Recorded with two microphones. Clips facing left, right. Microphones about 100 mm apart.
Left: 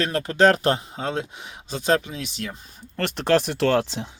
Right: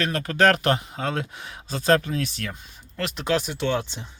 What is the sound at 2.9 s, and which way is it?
Speech, 55° left (ahead or behind).